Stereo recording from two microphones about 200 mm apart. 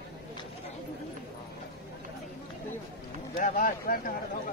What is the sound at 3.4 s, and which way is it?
Speech, 45° left (ahead or behind).